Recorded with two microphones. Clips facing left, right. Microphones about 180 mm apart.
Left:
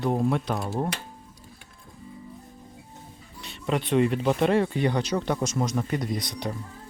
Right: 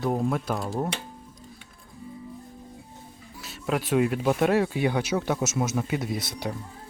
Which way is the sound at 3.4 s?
5° right (ahead or behind).